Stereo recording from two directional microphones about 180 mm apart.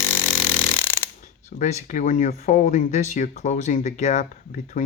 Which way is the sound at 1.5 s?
45° left (ahead or behind).